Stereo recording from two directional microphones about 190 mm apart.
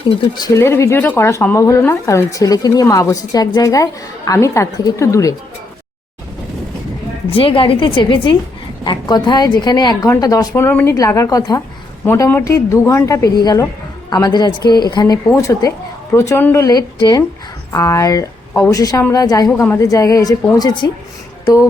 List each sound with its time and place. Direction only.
0.3 s speech: 15° left (ahead or behind)
7.3 s a woman's voice: 30° left (ahead or behind)